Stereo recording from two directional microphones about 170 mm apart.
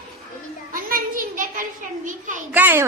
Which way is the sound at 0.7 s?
55° right (ahead or behind).